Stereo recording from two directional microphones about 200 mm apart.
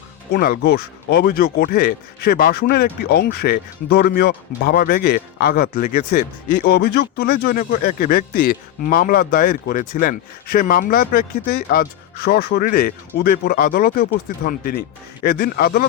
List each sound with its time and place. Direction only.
0.3 s speech: 50° left (ahead or behind)